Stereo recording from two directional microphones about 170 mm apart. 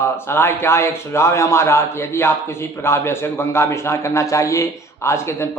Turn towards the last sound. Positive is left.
turn(degrees=15)  # may be behind; listen again after turning